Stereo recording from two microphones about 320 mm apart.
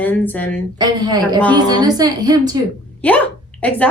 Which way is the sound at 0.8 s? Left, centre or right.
Centre.